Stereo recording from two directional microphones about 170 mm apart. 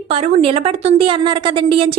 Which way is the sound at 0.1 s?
35° right (ahead or behind).